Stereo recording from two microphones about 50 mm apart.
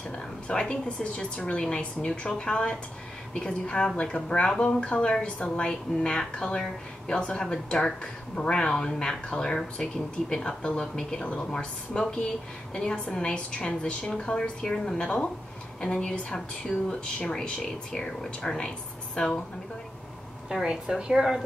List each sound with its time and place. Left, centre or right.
0.5 s a woman's voice: centre
20.6 s a woman's voice: centre